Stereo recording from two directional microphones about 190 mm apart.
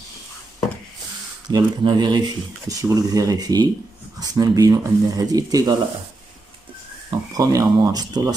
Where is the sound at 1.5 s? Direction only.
25° right (ahead or behind).